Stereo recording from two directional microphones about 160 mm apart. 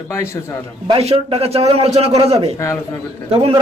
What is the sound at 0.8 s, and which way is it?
A man's voice, 35° right (ahead or behind).